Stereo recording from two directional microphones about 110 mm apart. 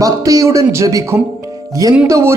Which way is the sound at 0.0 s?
30° right (ahead or behind).